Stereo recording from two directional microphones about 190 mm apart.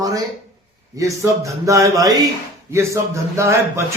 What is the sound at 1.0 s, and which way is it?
A man's voice, 15° right (ahead or behind).